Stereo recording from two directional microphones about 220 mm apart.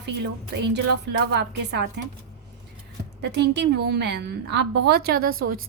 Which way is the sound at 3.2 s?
50° right (ahead or behind).